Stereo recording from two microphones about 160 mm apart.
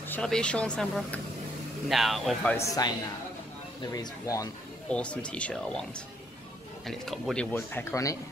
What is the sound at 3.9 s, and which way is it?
Speech, 20° left (ahead or behind).